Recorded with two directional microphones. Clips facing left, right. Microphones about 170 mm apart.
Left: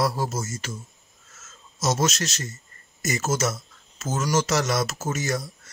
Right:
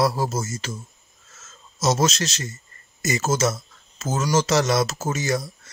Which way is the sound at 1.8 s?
90° right.